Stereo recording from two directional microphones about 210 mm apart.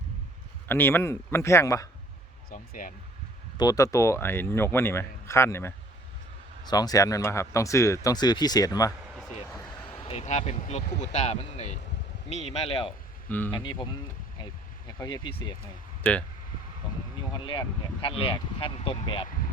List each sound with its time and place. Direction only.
0.7 s speech: 10° left (ahead or behind)
2.5 s speech: 40° left (ahead or behind)
3.6 s speech: 15° left (ahead or behind)
9.9 s speech: 30° left (ahead or behind)
13.2 s speech: 10° left (ahead or behind)
13.5 s speech: 20° left (ahead or behind)
17.4 s speech: 25° left (ahead or behind)